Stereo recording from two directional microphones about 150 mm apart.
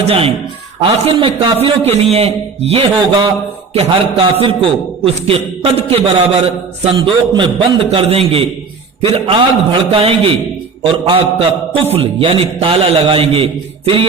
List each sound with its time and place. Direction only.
0.0 s a man's voice: 40° right (ahead or behind)
6.9 s a man's voice: 30° right (ahead or behind)